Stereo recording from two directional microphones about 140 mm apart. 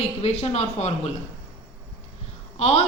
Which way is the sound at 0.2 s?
50° left (ahead or behind).